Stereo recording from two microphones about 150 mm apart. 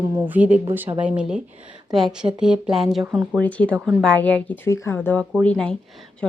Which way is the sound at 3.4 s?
10° left (ahead or behind).